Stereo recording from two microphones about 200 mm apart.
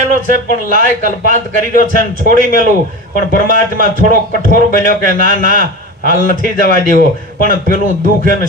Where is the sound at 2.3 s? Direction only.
40° right (ahead or behind).